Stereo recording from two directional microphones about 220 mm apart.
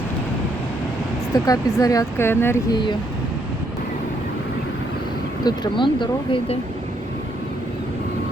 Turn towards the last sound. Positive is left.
turn(degrees=20)  # may be behind; listen again after turning